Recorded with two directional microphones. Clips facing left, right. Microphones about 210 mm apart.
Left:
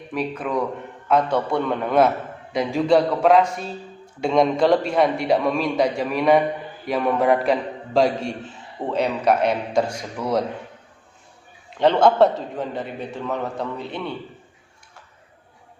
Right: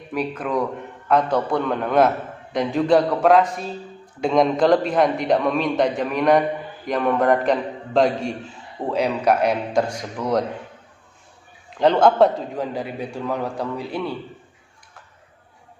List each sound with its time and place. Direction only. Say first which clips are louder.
0.1 s a man's voice: right 1 dB; centre (ahead or behind)
11.7 s a man's voice: even; centre (ahead or behind)